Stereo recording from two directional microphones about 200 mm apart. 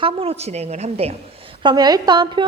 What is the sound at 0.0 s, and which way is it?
A woman's voice, 30° right (ahead or behind).